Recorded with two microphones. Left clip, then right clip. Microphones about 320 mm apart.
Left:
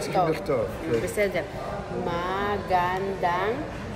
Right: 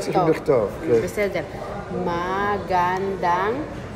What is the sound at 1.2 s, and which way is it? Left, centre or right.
A woman's voice, centre.